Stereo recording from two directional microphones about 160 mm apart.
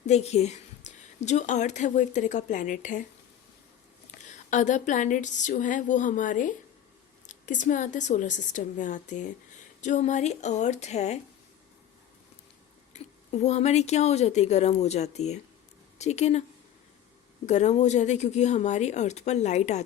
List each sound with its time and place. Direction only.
0.0 s a woman's voice: 45° left (ahead or behind)
4.3 s a woman's voice: 50° left (ahead or behind)
12.9 s a woman's voice: 45° left (ahead or behind)
17.4 s a woman's voice: 45° left (ahead or behind)